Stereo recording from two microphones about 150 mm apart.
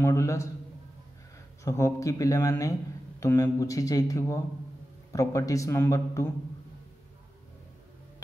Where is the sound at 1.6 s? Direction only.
20° left (ahead or behind).